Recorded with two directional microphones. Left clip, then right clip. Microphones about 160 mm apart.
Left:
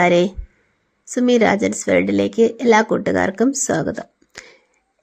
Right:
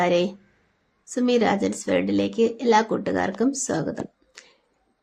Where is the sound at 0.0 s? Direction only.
35° left (ahead or behind).